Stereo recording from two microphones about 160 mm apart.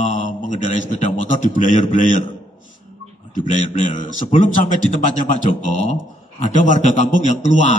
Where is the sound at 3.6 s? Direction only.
55° left (ahead or behind).